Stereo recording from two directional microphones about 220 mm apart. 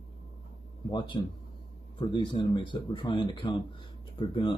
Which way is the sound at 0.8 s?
20° left (ahead or behind).